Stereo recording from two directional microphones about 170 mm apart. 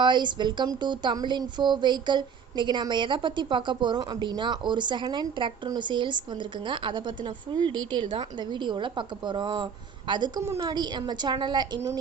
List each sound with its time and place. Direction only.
0.0 s speech: 25° right (ahead or behind)